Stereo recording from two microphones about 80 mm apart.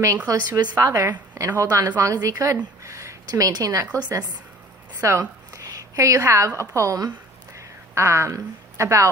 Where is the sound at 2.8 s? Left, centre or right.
Right.